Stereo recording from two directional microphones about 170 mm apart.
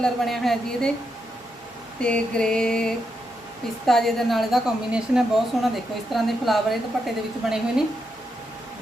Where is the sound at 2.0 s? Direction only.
5° left (ahead or behind).